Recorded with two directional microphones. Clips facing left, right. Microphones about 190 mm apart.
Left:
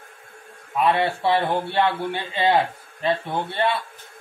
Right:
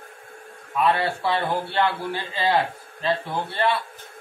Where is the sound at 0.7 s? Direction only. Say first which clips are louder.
Left 1 dB; 20° left (ahead or behind).